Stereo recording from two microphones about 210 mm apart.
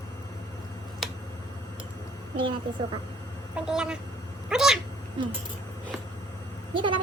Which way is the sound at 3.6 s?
5° right (ahead or behind).